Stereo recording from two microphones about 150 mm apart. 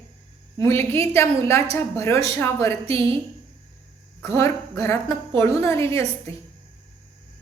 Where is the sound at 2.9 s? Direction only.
35° right (ahead or behind).